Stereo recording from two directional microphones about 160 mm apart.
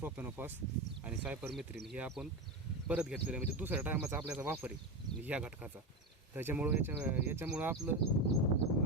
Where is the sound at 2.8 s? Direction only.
5° right (ahead or behind).